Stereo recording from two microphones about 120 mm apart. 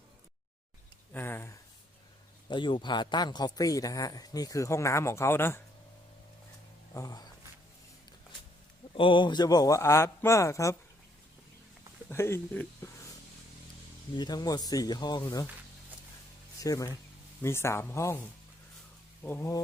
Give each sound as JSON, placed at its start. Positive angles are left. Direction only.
{"t": 1.1, "sound": "a sound", "side_deg": 20}
{"t": 2.5, "sound": "speech", "side_deg": 45}
{"t": 6.9, "sound": "speech", "side_deg": 30}
{"t": 9.0, "sound": "a man's voice", "side_deg": 45}
{"t": 12.0, "sound": "speech", "side_deg": 20}
{"t": 14.2, "sound": "speech", "side_deg": 35}
{"t": 16.6, "sound": "a man's voice", "side_deg": 30}
{"t": 19.2, "sound": "a man's voice", "side_deg": 20}